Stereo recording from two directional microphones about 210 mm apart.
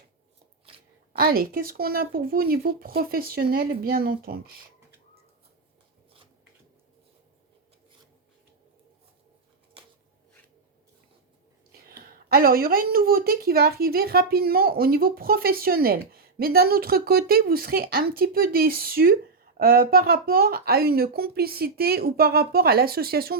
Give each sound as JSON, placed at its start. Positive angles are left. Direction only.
{"t": 1.1, "sound": "a woman's voice", "side_deg": -45}
{"t": 11.9, "sound": "a woman's voice", "side_deg": -45}